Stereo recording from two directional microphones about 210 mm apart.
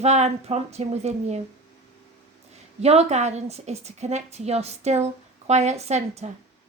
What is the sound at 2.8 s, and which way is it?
Speech, 30° right (ahead or behind).